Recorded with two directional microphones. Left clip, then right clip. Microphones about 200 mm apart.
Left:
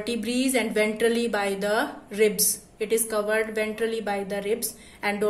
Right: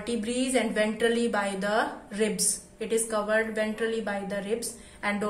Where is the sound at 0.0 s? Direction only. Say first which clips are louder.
Left 3 dB; 45° left (ahead or behind).